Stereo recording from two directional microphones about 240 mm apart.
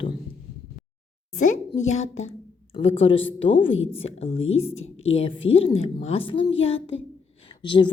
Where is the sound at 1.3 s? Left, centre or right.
Left.